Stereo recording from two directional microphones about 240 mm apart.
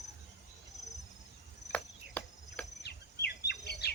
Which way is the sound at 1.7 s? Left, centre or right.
Centre.